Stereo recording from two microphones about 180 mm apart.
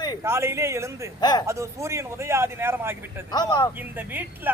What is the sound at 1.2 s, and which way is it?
Speech, 25° left (ahead or behind).